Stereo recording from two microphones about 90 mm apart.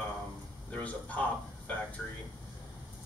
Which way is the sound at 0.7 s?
15° left (ahead or behind).